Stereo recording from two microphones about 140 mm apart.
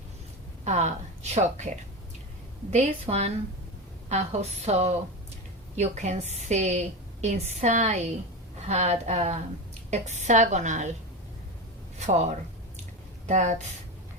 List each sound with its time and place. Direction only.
0.6 s a woman's voice: 55° right (ahead or behind)
11.9 s squish: 55° right (ahead or behind)
13.2 s a woman's voice: 60° right (ahead or behind)